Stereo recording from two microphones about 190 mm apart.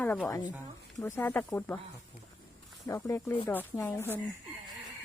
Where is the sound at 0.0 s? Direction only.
10° left (ahead or behind).